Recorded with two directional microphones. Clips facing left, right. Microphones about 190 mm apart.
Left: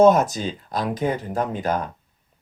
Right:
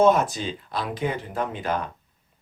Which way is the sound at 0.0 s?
40° left (ahead or behind).